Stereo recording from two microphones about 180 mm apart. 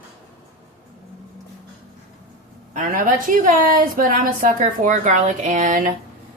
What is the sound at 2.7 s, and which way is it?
A woman's voice, 50° right (ahead or behind).